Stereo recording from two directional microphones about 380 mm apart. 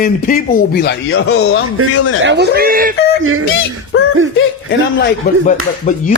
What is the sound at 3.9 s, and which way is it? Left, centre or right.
A man's voice, left.